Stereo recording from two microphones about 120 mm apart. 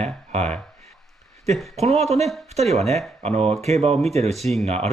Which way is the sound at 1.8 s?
65° right (ahead or behind).